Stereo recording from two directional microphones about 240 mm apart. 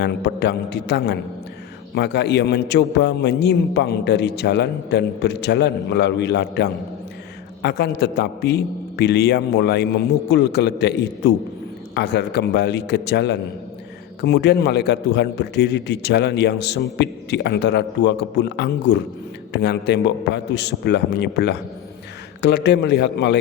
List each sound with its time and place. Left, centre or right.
0.0 s a man's voice: left